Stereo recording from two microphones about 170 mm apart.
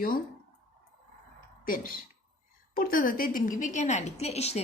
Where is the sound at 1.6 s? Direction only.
55° left (ahead or behind).